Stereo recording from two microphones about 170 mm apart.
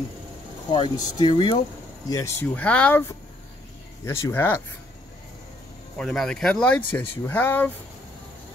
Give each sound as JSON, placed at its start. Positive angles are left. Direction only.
{"t": 0.7, "sound": "speech", "side_deg": 25}
{"t": 2.0, "sound": "speech", "side_deg": 15}
{"t": 5.9, "sound": "speech", "side_deg": 5}